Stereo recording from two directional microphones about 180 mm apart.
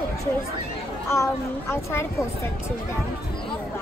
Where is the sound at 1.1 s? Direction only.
15° left (ahead or behind).